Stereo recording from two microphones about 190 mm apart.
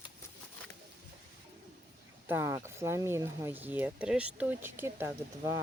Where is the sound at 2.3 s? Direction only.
15° right (ahead or behind).